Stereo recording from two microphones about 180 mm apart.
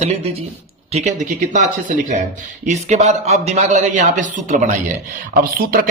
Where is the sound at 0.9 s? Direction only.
40° right (ahead or behind).